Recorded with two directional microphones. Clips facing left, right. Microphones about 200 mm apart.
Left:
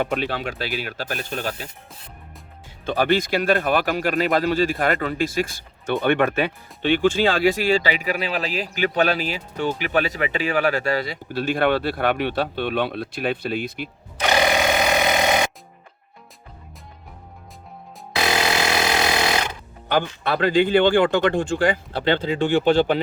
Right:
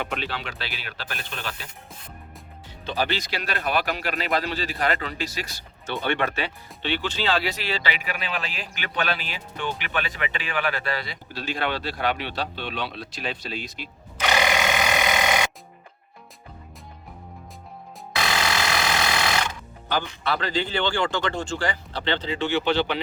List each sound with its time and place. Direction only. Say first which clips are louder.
0.0 s speech: left 6 dB; 45° left (ahead or behind)
2.8 s speech: left 7 dB; 50° left (ahead or behind)
14.2 s telephone bell ringing: left 4 dB; 40° left (ahead or behind)
18.3 s a sound: left 5 dB; 25° left (ahead or behind)
19.9 s speech: left 5 dB; 55° left (ahead or behind)